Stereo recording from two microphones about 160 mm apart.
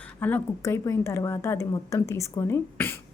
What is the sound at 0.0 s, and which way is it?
A woman's voice, 10° left (ahead or behind).